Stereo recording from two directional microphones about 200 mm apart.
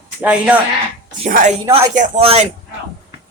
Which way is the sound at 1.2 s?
35° right (ahead or behind).